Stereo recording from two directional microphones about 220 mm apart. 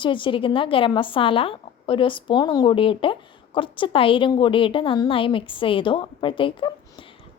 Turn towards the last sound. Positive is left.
turn(degrees=25)  # may be behind; listen again after turning